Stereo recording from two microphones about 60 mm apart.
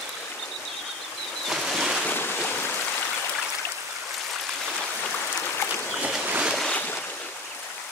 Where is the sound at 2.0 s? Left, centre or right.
Left.